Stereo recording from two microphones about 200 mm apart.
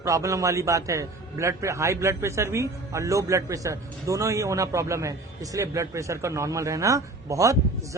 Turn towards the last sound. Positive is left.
turn(degrees=-15)  # may be behind; listen again after turning